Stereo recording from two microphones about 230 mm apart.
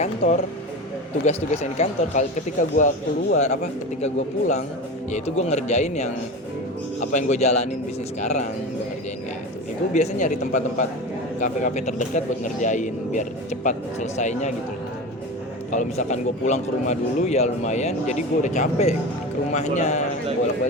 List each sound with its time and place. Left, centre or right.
0.2 s speech: left
9.9 s speech: left
15.7 s speech: left